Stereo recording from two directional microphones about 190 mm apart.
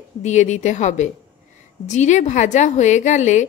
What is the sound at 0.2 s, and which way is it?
A woman's voice, 40° left (ahead or behind).